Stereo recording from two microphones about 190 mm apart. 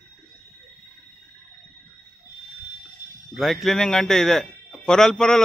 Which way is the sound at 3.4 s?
Centre (ahead or behind).